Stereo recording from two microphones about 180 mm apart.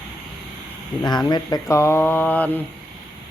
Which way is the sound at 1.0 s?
25° left (ahead or behind).